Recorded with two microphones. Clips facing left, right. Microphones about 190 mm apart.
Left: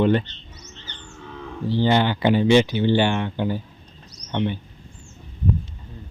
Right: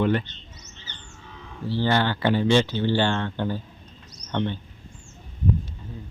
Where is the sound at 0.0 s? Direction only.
25° left (ahead or behind).